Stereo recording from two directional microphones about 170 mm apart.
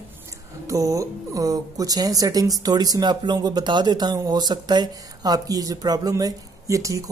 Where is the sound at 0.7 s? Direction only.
20° right (ahead or behind).